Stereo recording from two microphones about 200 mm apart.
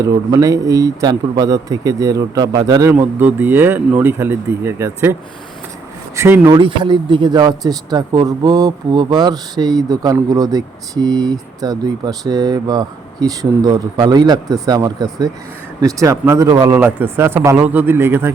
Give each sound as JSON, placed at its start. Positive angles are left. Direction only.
{"t": 0.0, "sound": "a man's voice", "side_deg": -15}
{"t": 6.1, "sound": "a man's voice", "side_deg": -10}